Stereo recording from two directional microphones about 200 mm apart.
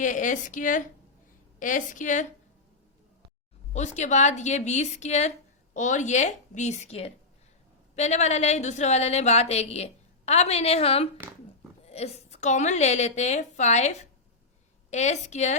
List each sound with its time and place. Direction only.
0.0 s a woman's voice: 40° left (ahead or behind)
3.7 s a woman's voice: 35° left (ahead or behind)